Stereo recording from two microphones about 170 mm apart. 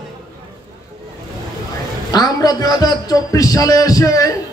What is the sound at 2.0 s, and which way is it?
A man's voice, 20° left (ahead or behind).